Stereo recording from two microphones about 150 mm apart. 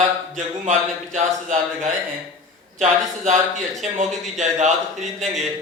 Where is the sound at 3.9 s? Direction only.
50° right (ahead or behind).